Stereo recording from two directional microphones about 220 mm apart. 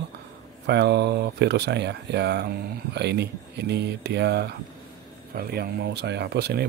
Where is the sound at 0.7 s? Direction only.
50° right (ahead or behind).